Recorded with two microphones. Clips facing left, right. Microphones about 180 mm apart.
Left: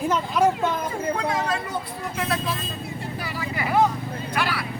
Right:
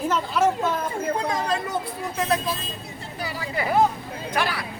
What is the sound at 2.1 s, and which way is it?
Speech, 20° right (ahead or behind).